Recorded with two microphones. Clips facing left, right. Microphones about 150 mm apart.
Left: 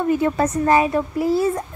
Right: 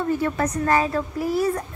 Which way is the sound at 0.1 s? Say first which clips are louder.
Left 5 dB; 20° left (ahead or behind).